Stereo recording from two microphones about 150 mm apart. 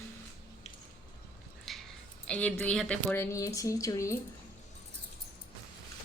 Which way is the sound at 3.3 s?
20° left (ahead or behind).